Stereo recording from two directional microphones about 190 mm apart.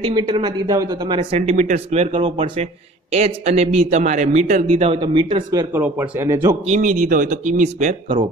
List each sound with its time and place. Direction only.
0.1 s a man's voice: 20° right (ahead or behind); by 4.9 s 40° right (ahead or behind)
5.0 s speech: 25° right (ahead or behind)
6.6 s speech: 40° right (ahead or behind)